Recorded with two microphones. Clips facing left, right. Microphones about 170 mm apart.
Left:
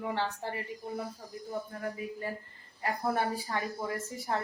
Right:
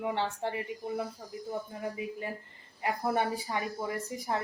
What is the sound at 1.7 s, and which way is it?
Speech, 15° right (ahead or behind).